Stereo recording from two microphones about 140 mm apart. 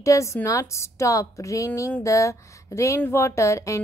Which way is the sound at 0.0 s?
20° left (ahead or behind).